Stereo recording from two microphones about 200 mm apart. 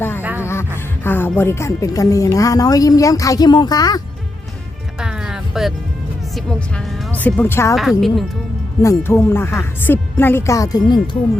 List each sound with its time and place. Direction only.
0.2 s music: 10° right (ahead or behind)
1.0 s speech: 10° left (ahead or behind)
4.9 s music: 5° right (ahead or behind)
6.3 s speech: 5° left (ahead or behind)
7.8 s a woman's voice: centre (ahead or behind)
8.8 s speech: 15° left (ahead or behind)